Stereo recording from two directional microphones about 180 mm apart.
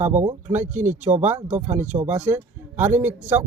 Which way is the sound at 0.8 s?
45° right (ahead or behind).